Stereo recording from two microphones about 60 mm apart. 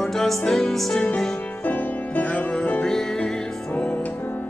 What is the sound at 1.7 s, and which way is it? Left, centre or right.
Music, left.